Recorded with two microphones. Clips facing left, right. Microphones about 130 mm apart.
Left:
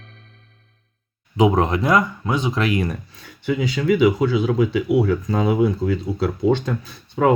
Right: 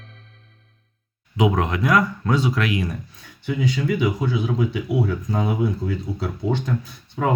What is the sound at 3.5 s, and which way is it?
Speech, 90° left.